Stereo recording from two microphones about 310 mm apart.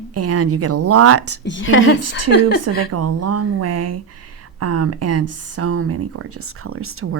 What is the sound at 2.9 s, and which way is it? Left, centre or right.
Speech, right.